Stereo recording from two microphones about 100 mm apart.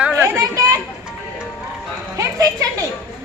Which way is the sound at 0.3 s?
35° right (ahead or behind).